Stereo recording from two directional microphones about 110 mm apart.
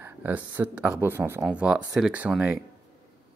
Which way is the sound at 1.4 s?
10° right (ahead or behind).